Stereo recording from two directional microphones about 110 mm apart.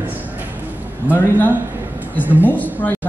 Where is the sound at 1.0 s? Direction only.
15° right (ahead or behind).